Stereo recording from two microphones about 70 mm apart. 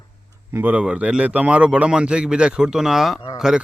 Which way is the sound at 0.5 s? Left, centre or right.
Right.